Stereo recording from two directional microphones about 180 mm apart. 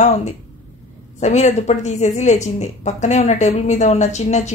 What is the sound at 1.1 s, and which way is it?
Speech, 40° left (ahead or behind).